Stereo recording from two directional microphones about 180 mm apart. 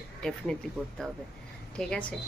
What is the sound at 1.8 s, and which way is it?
Speech, 5° left (ahead or behind).